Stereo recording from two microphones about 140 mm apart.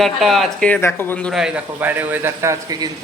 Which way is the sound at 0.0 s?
Centre (ahead or behind).